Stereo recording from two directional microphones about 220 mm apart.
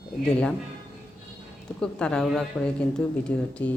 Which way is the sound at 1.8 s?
5° left (ahead or behind).